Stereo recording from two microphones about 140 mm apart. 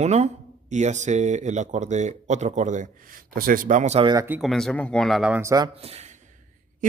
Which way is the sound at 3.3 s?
90° right.